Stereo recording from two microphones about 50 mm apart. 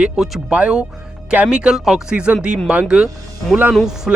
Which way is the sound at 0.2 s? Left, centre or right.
Centre.